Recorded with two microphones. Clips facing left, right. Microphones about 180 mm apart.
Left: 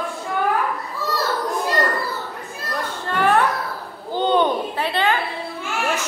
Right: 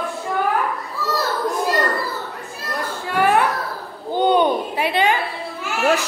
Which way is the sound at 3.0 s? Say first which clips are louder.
Right 1 dB; 10° right (ahead or behind).